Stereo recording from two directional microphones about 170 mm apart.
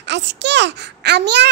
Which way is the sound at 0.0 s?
90° right.